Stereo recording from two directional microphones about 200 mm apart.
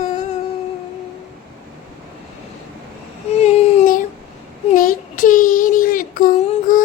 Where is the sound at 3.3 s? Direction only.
30° left (ahead or behind).